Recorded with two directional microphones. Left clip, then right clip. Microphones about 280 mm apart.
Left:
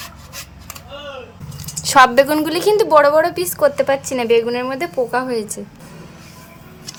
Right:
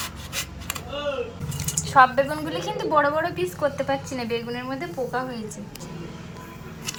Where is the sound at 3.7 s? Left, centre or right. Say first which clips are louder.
Left 9 dB; left.